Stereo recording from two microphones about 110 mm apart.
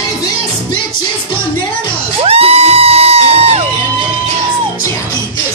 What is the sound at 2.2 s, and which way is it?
Music, 65° right (ahead or behind).